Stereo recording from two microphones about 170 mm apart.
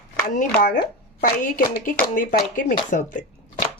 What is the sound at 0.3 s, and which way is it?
A woman's voice, 50° left (ahead or behind).